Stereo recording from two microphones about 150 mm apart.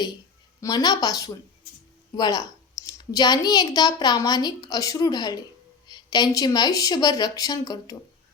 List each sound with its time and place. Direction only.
0.6 s a woman's voice: 25° left (ahead or behind)